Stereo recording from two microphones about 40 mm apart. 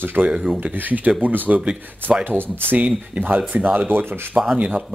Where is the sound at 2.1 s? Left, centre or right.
Centre.